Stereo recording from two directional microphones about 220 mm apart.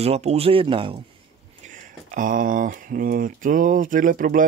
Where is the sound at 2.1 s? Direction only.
40° right (ahead or behind).